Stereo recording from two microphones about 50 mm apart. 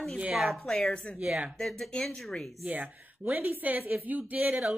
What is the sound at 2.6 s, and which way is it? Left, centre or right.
A woman's voice, right.